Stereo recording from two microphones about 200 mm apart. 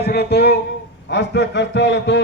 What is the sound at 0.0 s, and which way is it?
A man's voice, 55° left (ahead or behind).